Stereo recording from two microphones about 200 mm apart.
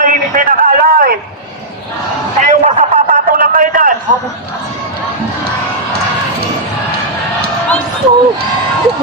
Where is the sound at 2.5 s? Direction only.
35° right (ahead or behind).